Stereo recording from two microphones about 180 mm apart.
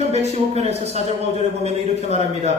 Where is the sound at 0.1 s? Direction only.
35° right (ahead or behind).